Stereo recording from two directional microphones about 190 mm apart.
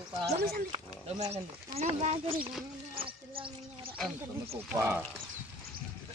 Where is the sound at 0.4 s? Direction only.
55° right (ahead or behind).